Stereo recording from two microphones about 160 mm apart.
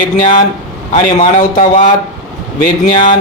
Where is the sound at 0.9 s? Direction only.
45° left (ahead or behind).